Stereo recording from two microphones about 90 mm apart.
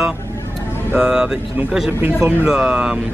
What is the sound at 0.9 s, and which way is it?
Speech, 10° right (ahead or behind).